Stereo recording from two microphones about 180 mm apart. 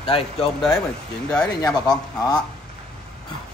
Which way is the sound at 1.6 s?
20° left (ahead or behind).